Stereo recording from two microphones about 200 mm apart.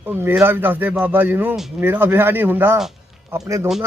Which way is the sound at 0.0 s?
10° right (ahead or behind).